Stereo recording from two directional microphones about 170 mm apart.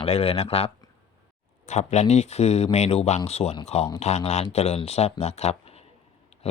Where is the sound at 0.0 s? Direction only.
35° left (ahead or behind).